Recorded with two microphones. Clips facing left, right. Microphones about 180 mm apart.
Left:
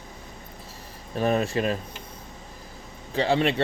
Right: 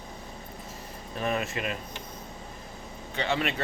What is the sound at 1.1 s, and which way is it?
Speech, 35° left (ahead or behind).